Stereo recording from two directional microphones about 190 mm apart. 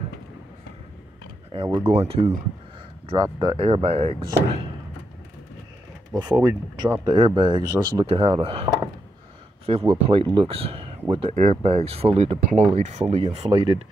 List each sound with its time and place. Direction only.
1.5 s speech: 25° right (ahead or behind)
6.1 s speech: 20° right (ahead or behind)